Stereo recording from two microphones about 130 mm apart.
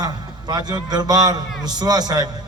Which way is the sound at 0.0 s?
30° right (ahead or behind).